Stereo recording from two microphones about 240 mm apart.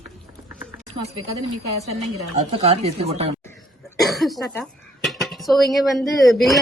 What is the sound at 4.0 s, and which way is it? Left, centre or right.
Cough, centre.